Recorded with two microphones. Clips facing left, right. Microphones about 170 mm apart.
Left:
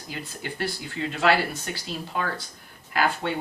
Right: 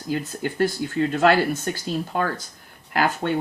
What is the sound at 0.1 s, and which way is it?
Speech, 45° right (ahead or behind).